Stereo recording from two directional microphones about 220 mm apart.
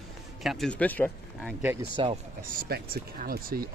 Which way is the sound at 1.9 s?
25° right (ahead or behind).